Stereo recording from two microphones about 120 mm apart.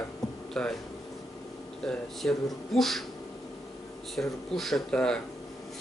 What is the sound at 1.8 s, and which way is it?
Speech, centre (ahead or behind).